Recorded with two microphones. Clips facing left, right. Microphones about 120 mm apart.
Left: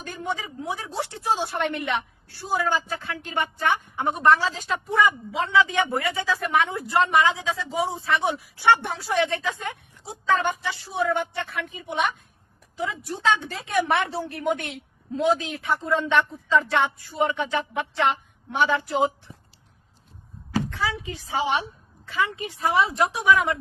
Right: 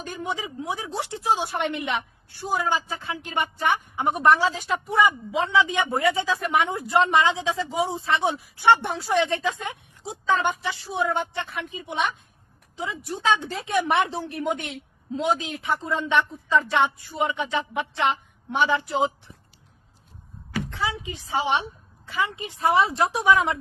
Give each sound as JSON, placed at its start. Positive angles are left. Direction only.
{"t": 0.0, "sound": "a woman's voice", "side_deg": -20}
{"t": 13.2, "sound": "a woman's voice", "side_deg": -20}
{"t": 20.7, "sound": "a woman's voice", "side_deg": -20}